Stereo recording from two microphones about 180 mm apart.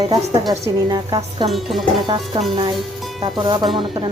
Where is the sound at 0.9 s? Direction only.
20° right (ahead or behind).